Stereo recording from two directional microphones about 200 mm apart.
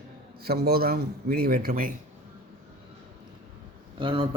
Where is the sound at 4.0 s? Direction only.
25° right (ahead or behind).